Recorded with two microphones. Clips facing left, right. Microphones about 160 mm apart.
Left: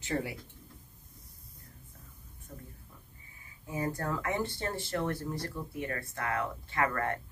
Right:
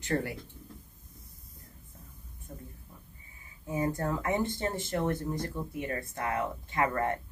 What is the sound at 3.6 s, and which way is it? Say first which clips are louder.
Speech: right 3 dB; 20° right (ahead or behind).